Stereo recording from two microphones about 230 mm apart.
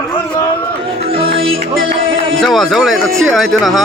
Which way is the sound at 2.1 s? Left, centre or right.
Right.